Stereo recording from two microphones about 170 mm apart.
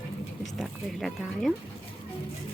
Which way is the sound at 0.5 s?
Centre (ahead or behind).